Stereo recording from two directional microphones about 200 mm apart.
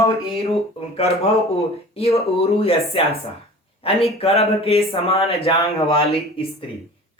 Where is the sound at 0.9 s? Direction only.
30° left (ahead or behind).